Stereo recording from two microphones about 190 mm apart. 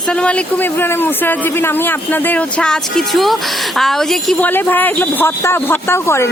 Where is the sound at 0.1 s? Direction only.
5° left (ahead or behind).